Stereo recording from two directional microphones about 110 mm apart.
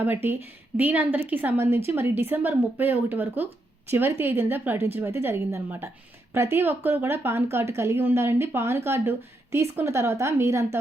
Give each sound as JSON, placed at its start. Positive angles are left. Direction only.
{"t": 0.0, "sound": "a woman's voice", "side_deg": -20}